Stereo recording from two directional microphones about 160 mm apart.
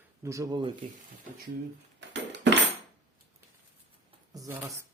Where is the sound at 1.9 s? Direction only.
90° right.